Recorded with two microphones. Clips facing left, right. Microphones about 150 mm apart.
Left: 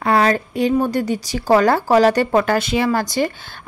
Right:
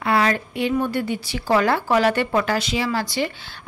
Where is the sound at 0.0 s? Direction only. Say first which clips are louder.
Left 4 dB; 40° left (ahead or behind).